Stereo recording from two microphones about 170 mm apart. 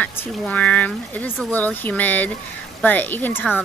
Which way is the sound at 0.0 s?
10° left (ahead or behind).